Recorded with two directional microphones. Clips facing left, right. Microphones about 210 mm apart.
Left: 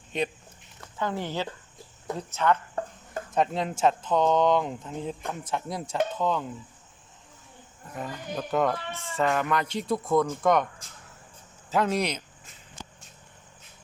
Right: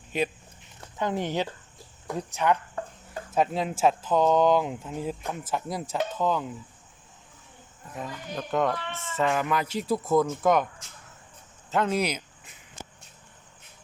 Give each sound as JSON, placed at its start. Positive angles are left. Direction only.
{"t": 0.1, "sound": "speech", "side_deg": -5}
{"t": 0.9, "sound": "speech", "side_deg": -20}
{"t": 2.8, "sound": "chicken", "side_deg": 35}
{"t": 3.3, "sound": "speech", "side_deg": -5}
{"t": 7.9, "sound": "speech", "side_deg": 0}
{"t": 11.7, "sound": "speech", "side_deg": 0}